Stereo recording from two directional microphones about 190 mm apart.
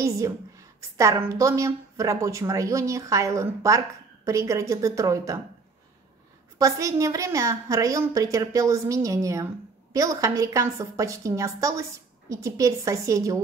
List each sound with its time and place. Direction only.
0.0 s a woman's voice: 15° right (ahead or behind)
6.6 s a woman's voice: 15° right (ahead or behind)